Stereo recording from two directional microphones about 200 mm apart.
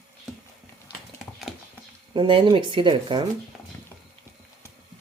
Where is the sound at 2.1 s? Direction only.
25° right (ahead or behind).